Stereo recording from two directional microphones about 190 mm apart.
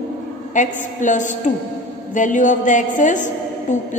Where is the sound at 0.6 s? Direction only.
40° left (ahead or behind).